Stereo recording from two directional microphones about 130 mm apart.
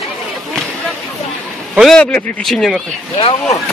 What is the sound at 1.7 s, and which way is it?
Speech, centre (ahead or behind).